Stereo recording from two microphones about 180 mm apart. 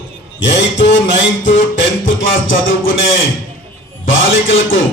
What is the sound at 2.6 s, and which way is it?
A man's voice, 90° left.